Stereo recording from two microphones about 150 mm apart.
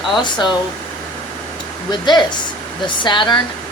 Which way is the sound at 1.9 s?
30° left (ahead or behind).